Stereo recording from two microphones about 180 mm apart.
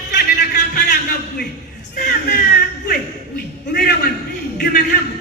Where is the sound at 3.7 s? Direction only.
55° left (ahead or behind).